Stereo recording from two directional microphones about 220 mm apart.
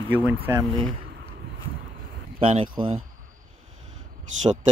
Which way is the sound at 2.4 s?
25° right (ahead or behind).